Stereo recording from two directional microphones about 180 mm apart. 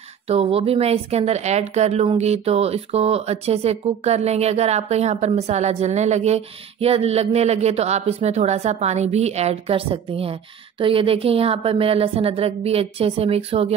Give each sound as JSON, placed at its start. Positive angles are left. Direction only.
{"t": 0.3, "sound": "speech", "side_deg": -35}